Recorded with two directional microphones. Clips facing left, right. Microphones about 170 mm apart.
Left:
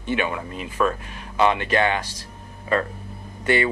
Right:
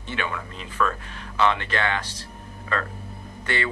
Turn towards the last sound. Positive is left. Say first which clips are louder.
# left 7 dB
turn(degrees=15)  # may be behind; listen again after turning